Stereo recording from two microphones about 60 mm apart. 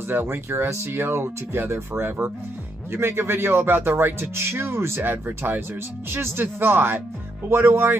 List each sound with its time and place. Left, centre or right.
0.1 s speech: right
5.1 s speech: right